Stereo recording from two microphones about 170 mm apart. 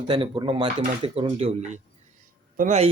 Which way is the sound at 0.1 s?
30° right (ahead or behind).